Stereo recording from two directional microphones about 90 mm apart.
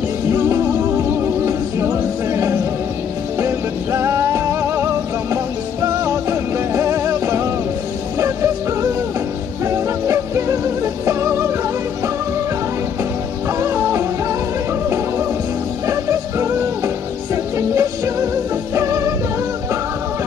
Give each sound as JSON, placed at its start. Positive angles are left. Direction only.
{"t": 0.3, "sound": "music", "side_deg": -30}
{"t": 3.3, "sound": "music", "side_deg": -35}
{"t": 6.7, "sound": "music", "side_deg": -35}
{"t": 9.7, "sound": "music", "side_deg": -30}
{"t": 13.6, "sound": "music", "side_deg": -30}
{"t": 15.9, "sound": "music", "side_deg": -30}